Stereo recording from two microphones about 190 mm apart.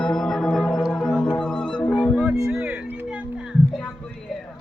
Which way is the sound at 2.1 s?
5° right (ahead or behind).